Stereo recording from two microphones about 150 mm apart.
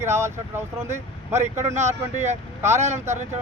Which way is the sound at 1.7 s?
50° right (ahead or behind).